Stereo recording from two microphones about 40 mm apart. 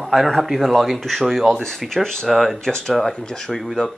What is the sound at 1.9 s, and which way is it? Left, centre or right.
Speech, centre.